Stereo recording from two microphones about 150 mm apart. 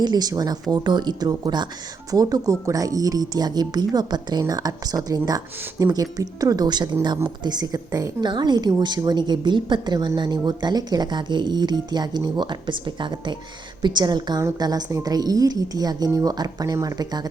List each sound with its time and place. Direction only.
0.0 s a woman's voice: 25° right (ahead or behind)